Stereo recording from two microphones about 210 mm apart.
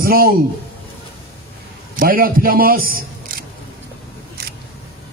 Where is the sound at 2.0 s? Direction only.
45° right (ahead or behind).